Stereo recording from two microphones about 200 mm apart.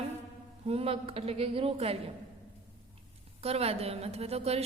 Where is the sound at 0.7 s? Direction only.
30° right (ahead or behind).